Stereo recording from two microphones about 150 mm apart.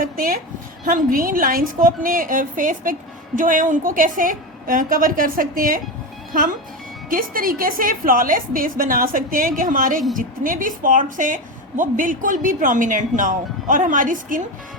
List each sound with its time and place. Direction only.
0.0 s a woman's voice: 70° right (ahead or behind)
7.1 s a woman's voice: 70° right (ahead or behind)